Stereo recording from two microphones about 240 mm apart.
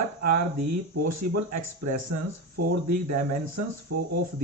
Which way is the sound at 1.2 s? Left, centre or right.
Right.